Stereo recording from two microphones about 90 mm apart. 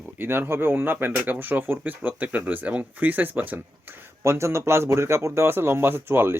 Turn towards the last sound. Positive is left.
turn(degrees=-25)  # may be behind; listen again after turning